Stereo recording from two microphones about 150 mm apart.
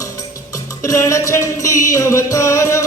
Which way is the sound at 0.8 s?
20° left (ahead or behind).